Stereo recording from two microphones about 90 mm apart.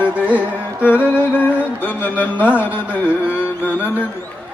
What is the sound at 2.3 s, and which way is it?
Mantra, 15° right (ahead or behind).